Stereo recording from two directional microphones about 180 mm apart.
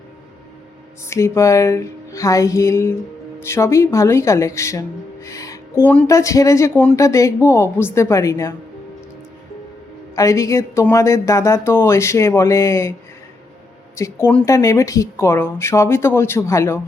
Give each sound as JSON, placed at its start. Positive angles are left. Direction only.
{"t": 1.1, "sound": "speech", "side_deg": 15}
{"t": 5.2, "sound": "a sound", "side_deg": 15}
{"t": 6.1, "sound": "speech", "side_deg": 15}
{"t": 10.2, "sound": "speech", "side_deg": 15}
{"t": 13.9, "sound": "speech", "side_deg": 15}